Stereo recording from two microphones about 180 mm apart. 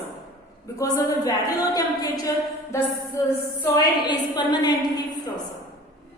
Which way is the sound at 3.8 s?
25° left (ahead or behind).